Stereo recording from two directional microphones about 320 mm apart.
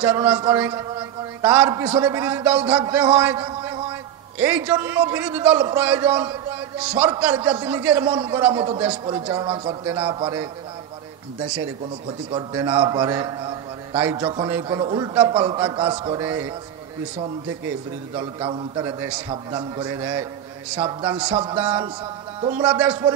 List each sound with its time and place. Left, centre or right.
0.0 s a man's voice: centre
12.3 s a man's voice: centre
18.1 s a man's voice: centre